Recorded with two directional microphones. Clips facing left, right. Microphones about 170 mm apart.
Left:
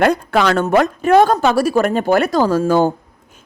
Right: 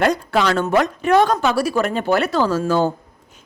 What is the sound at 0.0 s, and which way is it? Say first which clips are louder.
A woman's voice: left 3 dB; 55° left (ahead or behind).